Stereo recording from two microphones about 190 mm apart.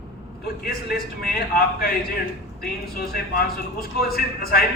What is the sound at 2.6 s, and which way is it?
Speech, 55° left (ahead or behind).